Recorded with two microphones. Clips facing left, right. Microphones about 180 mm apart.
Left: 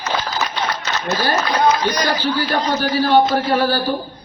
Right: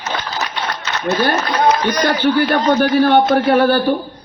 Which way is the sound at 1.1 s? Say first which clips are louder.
Right 3 dB; 55° right (ahead or behind).